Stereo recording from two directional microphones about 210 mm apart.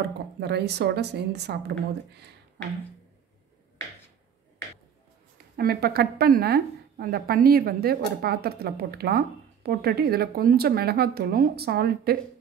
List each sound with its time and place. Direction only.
0.4 s a woman's voice: 50° right (ahead or behind)
5.6 s a woman's voice: 45° right (ahead or behind)